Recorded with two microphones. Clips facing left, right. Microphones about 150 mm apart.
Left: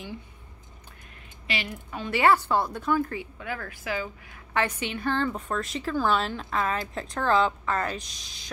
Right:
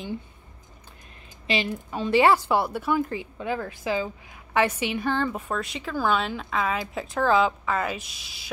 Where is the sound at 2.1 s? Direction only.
15° right (ahead or behind).